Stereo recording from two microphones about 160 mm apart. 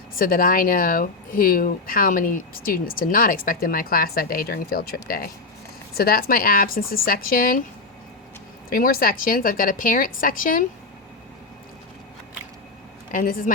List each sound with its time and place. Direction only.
0.1 s speech: 65° left (ahead or behind)
8.7 s speech: 65° left (ahead or behind)
13.1 s speech: 60° left (ahead or behind)